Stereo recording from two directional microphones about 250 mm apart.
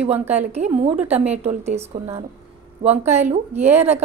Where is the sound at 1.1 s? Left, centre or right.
Centre.